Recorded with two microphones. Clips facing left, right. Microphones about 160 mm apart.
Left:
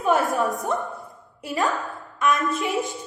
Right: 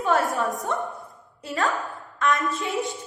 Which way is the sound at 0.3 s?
Centre (ahead or behind).